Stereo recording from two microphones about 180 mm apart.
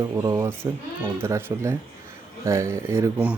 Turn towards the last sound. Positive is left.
turn(degrees=-10)  # may be behind; listen again after turning